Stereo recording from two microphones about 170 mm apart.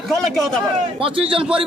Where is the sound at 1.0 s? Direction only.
30° right (ahead or behind).